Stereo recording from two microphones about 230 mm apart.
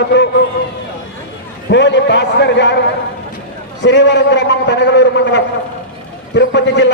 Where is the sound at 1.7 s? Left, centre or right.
Left.